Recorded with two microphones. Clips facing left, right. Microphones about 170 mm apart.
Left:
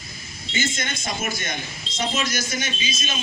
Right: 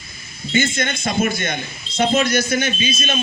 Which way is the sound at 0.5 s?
55° right (ahead or behind).